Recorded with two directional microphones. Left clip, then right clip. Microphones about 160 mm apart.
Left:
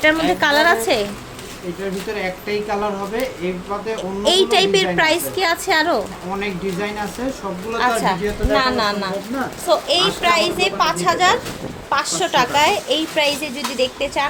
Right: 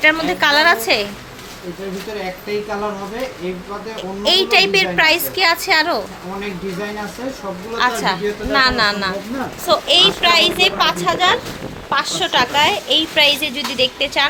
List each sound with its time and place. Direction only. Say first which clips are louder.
0.0 s a woman's voice: right 1 dB; 15° left (ahead or behind)
3.9 s a woman's voice: right 1 dB; 20° left (ahead or behind)
7.8 s a child's voice: right 1 dB; 10° left (ahead or behind)